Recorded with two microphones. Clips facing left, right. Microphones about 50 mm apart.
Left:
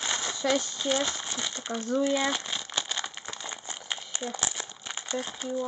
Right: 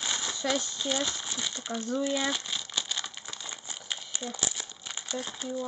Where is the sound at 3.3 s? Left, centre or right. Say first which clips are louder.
Left 3 dB; left.